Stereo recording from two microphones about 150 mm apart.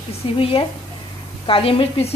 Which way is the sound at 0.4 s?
35° left (ahead or behind).